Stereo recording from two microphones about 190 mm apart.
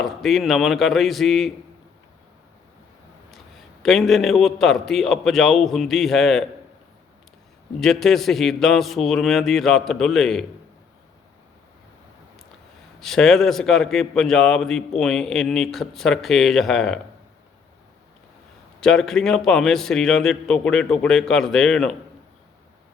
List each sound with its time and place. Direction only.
0.0 s a man's voice: centre (ahead or behind)
3.8 s a man's voice: centre (ahead or behind)
7.8 s a man's voice: centre (ahead or behind)
13.0 s a man's voice: centre (ahead or behind)
18.8 s a man's voice: centre (ahead or behind)